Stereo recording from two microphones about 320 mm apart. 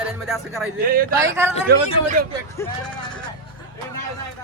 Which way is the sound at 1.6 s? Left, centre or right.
Right.